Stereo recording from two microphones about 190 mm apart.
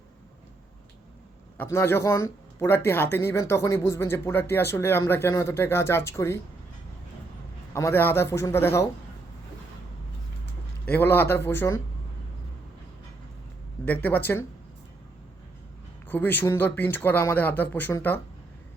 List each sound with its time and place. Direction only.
1.5 s speech: 15° left (ahead or behind)
7.7 s speech: 15° left (ahead or behind)
10.8 s speech: 10° left (ahead or behind)
13.8 s speech: 10° left (ahead or behind)
16.0 s speech: 10° left (ahead or behind)